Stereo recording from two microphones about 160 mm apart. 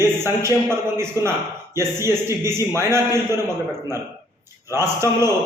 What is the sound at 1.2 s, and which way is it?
Speech, 20° left (ahead or behind).